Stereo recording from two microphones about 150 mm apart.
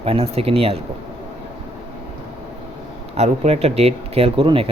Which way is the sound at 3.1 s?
45° right (ahead or behind).